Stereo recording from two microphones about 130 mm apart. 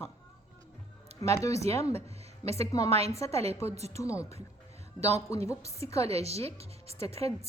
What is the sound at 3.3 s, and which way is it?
Speech, 50° right (ahead or behind).